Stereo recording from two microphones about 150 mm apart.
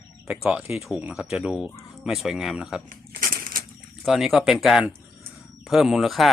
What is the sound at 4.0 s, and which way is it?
Speech, centre (ahead or behind).